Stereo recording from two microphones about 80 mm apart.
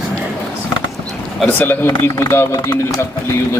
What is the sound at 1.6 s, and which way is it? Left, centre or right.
Speech, left.